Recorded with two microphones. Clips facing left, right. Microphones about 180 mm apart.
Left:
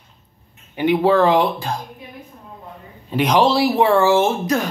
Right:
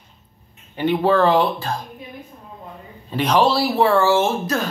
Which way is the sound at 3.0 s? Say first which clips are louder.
Left 1 dB; 15° left (ahead or behind).